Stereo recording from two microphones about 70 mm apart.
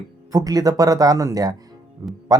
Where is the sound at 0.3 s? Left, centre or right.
Right.